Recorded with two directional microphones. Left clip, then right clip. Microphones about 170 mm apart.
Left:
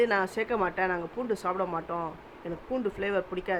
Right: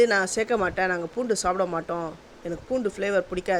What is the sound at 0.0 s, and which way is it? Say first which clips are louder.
Speech: right 5 dB; 25° right (ahead or behind).